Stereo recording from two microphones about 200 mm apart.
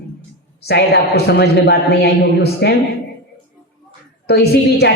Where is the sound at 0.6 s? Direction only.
55° left (ahead or behind).